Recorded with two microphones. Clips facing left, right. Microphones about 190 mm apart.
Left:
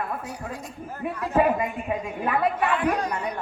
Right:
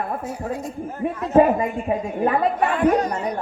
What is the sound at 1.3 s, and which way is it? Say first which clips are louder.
A man's voice: right 6 dB; 35° right (ahead or behind).